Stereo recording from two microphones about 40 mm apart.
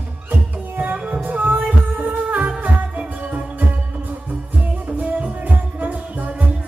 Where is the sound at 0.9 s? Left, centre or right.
Right.